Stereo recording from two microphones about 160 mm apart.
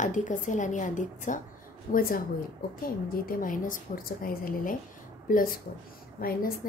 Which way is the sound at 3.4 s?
60° left (ahead or behind).